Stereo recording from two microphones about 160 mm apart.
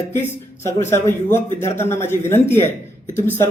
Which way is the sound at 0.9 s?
15° left (ahead or behind).